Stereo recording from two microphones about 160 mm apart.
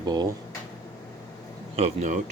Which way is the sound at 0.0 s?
25° right (ahead or behind).